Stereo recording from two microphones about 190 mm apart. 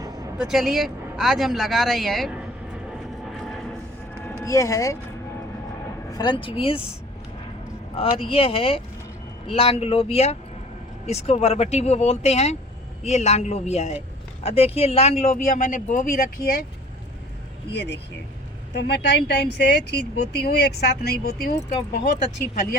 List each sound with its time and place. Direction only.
0.3 s speech: centre (ahead or behind)
3.2 s vehicle: centre (ahead or behind)
4.4 s speech: 15° left (ahead or behind)
6.1 s speech: 20° left (ahead or behind)
7.9 s speech: 30° left (ahead or behind); by 16.6 s 50° left (ahead or behind)
17.7 s speech: 65° left (ahead or behind)